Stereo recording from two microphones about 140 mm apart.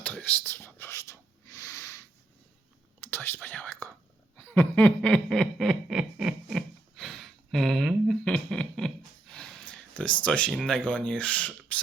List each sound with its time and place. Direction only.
0.0 s whispering: 10° left (ahead or behind)
3.1 s speech: 15° left (ahead or behind)
4.4 s a sound: 10° left (ahead or behind)
10.8 s speech: 10° left (ahead or behind)